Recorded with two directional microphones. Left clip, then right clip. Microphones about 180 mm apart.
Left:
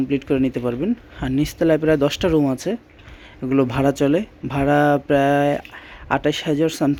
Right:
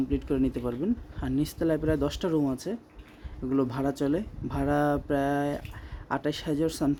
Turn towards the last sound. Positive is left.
turn(degrees=15)  # may be behind; listen again after turning